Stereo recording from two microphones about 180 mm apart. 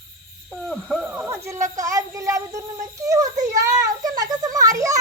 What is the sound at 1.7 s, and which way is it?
Child singing, 20° right (ahead or behind).